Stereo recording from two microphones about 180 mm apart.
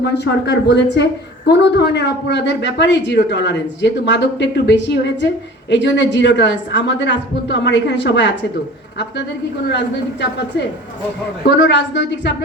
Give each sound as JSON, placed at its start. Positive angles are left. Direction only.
{"t": 0.0, "sound": "a woman's voice", "side_deg": 70}
{"t": 9.6, "sound": "a woman's voice", "side_deg": 70}
{"t": 11.4, "sound": "a woman's voice", "side_deg": 75}